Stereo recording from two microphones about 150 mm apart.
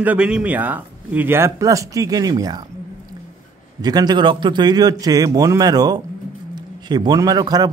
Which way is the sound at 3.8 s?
25° right (ahead or behind).